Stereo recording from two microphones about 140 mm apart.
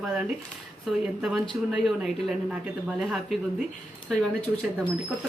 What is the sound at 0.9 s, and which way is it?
Speech, centre (ahead or behind).